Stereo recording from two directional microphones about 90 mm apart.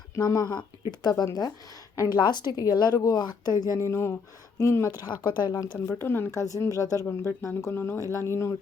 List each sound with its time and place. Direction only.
0.2 s a woman's voice: 45° left (ahead or behind)
4.9 s a woman's voice: 50° left (ahead or behind)
6.0 s speech: 25° left (ahead or behind)
6.3 s speech: 40° left (ahead or behind)